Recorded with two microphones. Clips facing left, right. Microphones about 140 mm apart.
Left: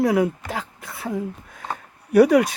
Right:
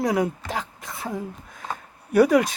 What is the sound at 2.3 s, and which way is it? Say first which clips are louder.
Speech: left 2 dB; 25° right (ahead or behind).